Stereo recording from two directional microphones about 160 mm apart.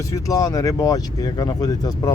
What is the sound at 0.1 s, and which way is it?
Speech, 20° left (ahead or behind).